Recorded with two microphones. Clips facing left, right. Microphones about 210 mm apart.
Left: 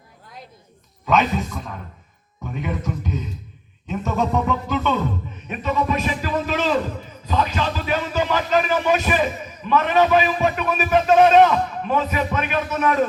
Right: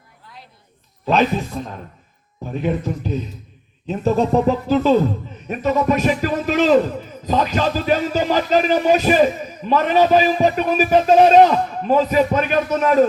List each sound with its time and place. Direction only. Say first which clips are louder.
1.0 s a man's voice: right 2 dB; 30° right (ahead or behind)